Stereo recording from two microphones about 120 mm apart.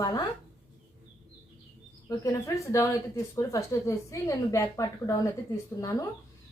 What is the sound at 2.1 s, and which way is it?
Speech, 25° left (ahead or behind).